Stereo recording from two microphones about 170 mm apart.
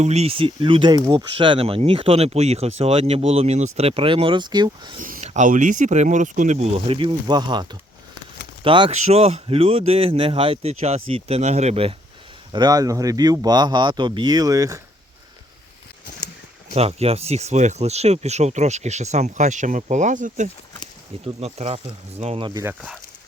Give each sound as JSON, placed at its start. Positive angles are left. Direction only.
{"t": 0.0, "sound": "speech", "side_deg": -40}
{"t": 4.9, "sound": "speech", "side_deg": -50}
{"t": 12.5, "sound": "speech", "side_deg": -20}
{"t": 16.7, "sound": "speech", "side_deg": -35}
{"t": 21.2, "sound": "speech", "side_deg": -40}
{"t": 22.6, "sound": "speech", "side_deg": -5}